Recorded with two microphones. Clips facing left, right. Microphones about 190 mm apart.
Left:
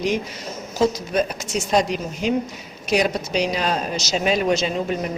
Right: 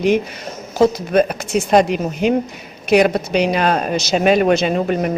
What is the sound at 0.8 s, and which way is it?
A woman's voice, 60° right (ahead or behind).